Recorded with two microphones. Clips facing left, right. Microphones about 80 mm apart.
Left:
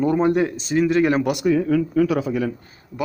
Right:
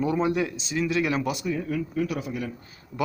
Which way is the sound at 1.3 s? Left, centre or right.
Left.